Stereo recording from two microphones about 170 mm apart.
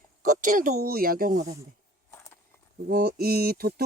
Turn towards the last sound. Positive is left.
turn(degrees=-65)  # may be behind; listen again after turning